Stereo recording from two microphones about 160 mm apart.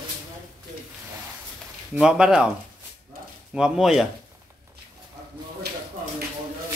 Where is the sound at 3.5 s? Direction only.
5° right (ahead or behind).